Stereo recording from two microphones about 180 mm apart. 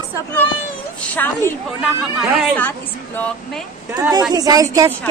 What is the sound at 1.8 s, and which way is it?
Speech, 5° right (ahead or behind).